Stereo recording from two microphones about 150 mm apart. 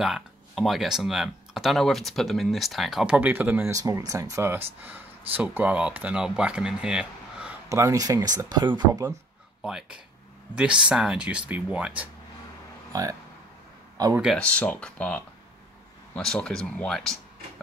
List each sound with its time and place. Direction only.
0.0 s speech: centre (ahead or behind)
7.7 s speech: 20° right (ahead or behind)
9.6 s speech: 5° right (ahead or behind)
14.0 s speech: 25° right (ahead or behind)
14.3 s speech: 10° left (ahead or behind)